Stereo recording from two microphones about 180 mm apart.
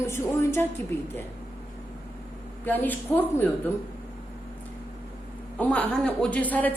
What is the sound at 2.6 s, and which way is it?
Speech, 10° left (ahead or behind).